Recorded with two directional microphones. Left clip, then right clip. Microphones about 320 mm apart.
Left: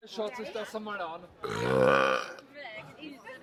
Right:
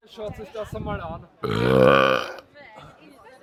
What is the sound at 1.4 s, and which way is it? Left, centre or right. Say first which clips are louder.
Burping: right 8 dB; right.